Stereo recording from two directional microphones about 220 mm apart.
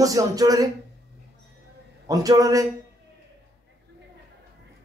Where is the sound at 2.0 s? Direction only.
15° right (ahead or behind).